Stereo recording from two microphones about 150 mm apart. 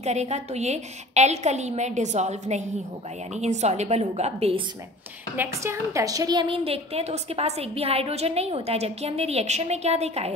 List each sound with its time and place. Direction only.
0.0 s a woman's voice: 50° right (ahead or behind)
5.3 s a woman's voice: 15° right (ahead or behind); by 10.3 s 45° right (ahead or behind)